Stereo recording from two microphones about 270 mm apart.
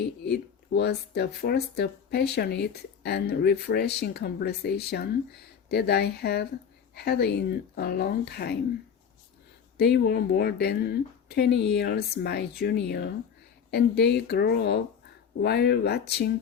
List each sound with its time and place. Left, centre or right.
0.0 s speech: left
9.7 s speech: left